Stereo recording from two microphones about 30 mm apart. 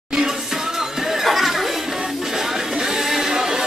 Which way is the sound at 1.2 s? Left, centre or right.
Centre.